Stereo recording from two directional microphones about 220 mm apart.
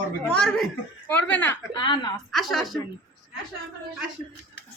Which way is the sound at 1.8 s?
20° left (ahead or behind).